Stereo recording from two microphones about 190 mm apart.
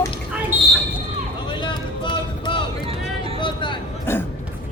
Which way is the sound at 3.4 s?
25° left (ahead or behind).